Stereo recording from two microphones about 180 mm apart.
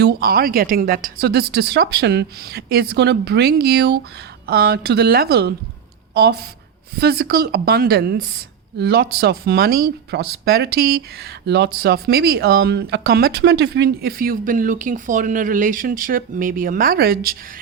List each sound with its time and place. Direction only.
0.0 s speech: 60° right (ahead or behind)